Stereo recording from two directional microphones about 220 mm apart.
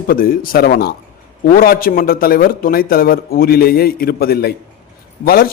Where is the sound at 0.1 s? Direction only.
40° left (ahead or behind).